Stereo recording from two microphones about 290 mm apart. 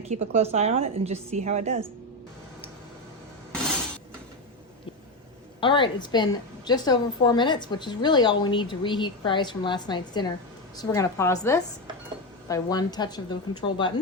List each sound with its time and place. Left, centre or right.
0.1 s a woman's voice: right
5.5 s a woman's voice: centre